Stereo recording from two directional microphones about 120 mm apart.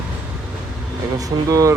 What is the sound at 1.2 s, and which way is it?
Speech, 25° right (ahead or behind).